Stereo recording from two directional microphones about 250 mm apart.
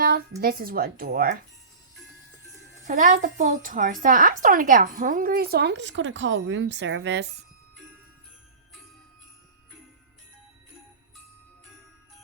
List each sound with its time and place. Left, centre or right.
0.0 s speech: right
2.8 s speech: right